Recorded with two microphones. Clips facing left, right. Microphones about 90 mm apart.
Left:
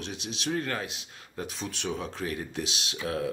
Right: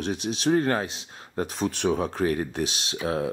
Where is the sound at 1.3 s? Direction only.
45° right (ahead or behind).